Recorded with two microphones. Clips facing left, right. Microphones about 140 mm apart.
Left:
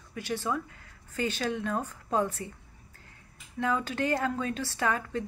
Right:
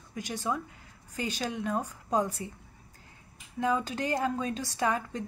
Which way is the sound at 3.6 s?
15° right (ahead or behind).